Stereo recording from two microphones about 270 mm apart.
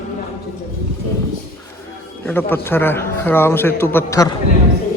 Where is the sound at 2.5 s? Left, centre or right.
Centre.